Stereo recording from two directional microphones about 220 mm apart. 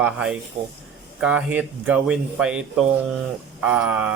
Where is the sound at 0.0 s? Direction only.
5° right (ahead or behind).